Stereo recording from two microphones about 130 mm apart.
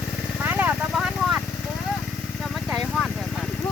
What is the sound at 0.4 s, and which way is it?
Vehicle, 15° right (ahead or behind).